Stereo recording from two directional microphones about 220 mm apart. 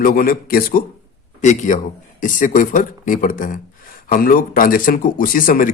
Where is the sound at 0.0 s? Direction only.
40° left (ahead or behind).